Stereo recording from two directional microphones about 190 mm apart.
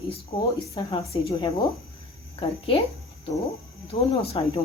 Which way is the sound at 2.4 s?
30° left (ahead or behind).